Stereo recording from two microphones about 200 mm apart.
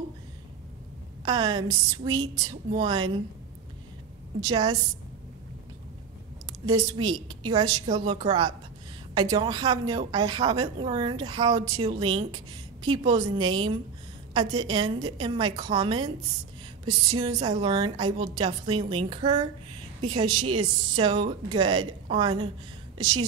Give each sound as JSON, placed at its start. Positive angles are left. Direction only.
{"t": 1.2, "sound": "a woman's voice", "side_deg": -20}
{"t": 4.5, "sound": "a woman's voice", "side_deg": -20}
{"t": 6.4, "sound": "a woman's voice", "side_deg": -20}